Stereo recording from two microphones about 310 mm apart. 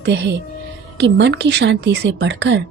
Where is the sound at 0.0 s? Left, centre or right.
Right.